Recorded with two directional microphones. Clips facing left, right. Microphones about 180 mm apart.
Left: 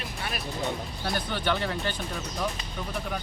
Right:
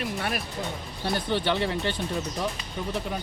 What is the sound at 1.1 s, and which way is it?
Speech, 25° right (ahead or behind).